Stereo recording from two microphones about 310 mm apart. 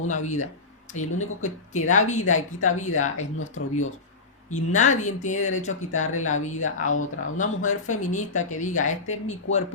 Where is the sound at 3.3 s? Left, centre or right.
Left.